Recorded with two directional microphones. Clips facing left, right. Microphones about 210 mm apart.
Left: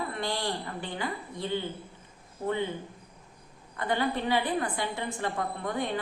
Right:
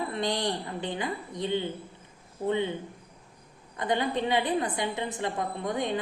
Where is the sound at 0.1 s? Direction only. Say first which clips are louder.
Right 3 dB; 20° right (ahead or behind).